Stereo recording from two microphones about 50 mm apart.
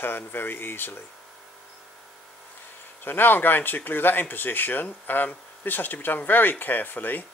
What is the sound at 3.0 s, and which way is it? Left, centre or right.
Speech, left.